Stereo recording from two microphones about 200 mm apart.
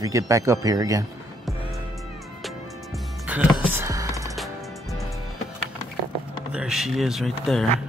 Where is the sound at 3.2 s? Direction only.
10° right (ahead or behind).